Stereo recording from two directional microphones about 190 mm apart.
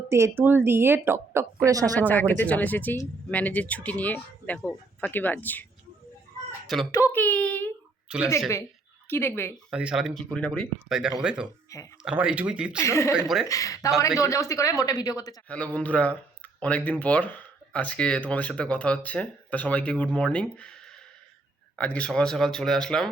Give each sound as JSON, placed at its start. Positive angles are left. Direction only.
{"t": 0.1, "sound": "a woman's voice", "side_deg": -15}
{"t": 2.0, "sound": "speech", "side_deg": 10}
{"t": 6.9, "sound": "speech", "side_deg": 10}
{"t": 8.1, "sound": "a woman's voice", "side_deg": -5}
{"t": 9.0, "sound": "speech", "side_deg": 10}
{"t": 9.6, "sound": "a woman's voice", "side_deg": -5}
{"t": 12.8, "sound": "speech", "side_deg": 15}
{"t": 13.1, "sound": "speech", "side_deg": -5}
{"t": 13.5, "sound": "speech", "side_deg": 15}
{"t": 15.4, "sound": "speech", "side_deg": 5}
{"t": 21.8, "sound": "speech", "side_deg": 5}